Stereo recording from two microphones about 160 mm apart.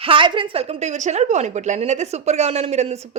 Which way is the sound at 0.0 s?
30° right (ahead or behind).